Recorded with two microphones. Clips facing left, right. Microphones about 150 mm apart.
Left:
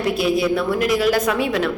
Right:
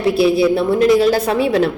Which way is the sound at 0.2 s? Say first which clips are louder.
Right 7 dB; 30° right (ahead or behind).